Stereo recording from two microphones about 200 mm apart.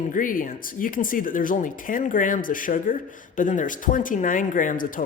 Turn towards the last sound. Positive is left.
turn(degrees=40)  # may be behind; listen again after turning